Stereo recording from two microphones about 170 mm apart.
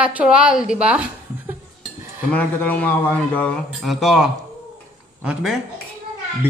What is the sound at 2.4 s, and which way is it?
Speech, 10° left (ahead or behind).